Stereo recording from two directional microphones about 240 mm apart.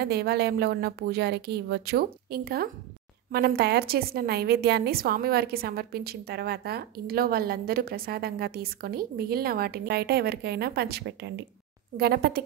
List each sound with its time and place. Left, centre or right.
0.0 s a woman's voice: right